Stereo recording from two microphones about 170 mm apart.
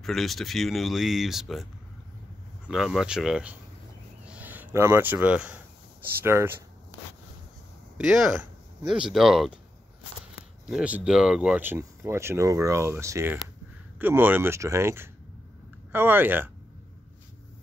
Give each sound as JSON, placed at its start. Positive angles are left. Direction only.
{"t": 0.0, "sound": "speech", "side_deg": 0}
{"t": 6.2, "sound": "a sound", "side_deg": -15}
{"t": 8.8, "sound": "speech", "side_deg": -30}
{"t": 9.1, "sound": "speech", "side_deg": 0}
{"t": 10.7, "sound": "speech", "side_deg": -5}